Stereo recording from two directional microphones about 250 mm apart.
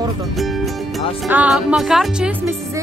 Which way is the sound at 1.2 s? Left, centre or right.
Centre.